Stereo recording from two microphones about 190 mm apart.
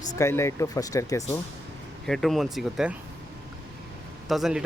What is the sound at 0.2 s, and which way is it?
Speech, 15° left (ahead or behind).